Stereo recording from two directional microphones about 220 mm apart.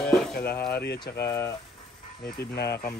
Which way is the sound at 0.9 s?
20° left (ahead or behind).